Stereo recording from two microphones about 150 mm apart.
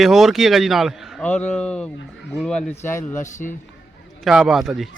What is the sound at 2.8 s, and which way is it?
Speech, 15° left (ahead or behind).